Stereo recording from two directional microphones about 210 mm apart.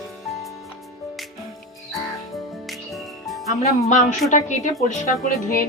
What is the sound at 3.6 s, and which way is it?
A woman's voice, 35° left (ahead or behind).